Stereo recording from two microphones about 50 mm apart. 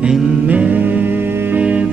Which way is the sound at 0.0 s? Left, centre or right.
Centre.